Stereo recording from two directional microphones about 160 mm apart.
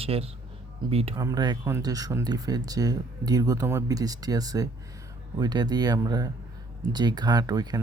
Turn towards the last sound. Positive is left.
turn(degrees=-25)  # may be behind; listen again after turning